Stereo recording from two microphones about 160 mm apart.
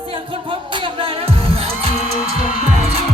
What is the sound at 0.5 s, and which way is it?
Music, 30° right (ahead or behind).